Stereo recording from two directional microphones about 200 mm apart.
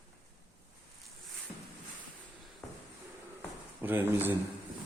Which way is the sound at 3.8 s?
10° right (ahead or behind).